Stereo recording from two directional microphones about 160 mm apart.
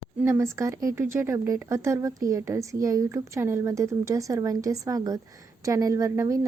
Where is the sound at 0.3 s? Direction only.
15° right (ahead or behind).